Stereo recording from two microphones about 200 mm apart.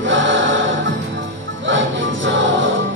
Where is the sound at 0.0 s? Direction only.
65° right (ahead or behind).